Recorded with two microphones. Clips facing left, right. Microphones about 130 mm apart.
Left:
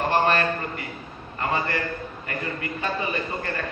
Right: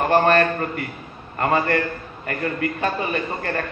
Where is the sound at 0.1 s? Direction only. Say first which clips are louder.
Right 6 dB; 50° right (ahead or behind).